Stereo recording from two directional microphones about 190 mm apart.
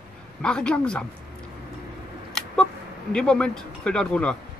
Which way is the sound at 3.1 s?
5° left (ahead or behind).